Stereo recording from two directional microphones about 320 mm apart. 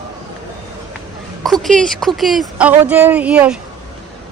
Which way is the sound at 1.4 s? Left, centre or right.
Centre.